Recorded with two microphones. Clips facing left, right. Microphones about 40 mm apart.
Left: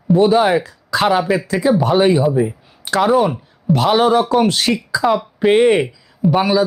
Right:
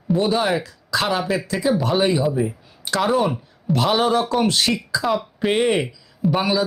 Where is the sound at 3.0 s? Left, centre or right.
Centre.